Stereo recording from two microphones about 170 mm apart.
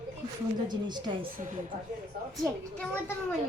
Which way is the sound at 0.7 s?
25° right (ahead or behind).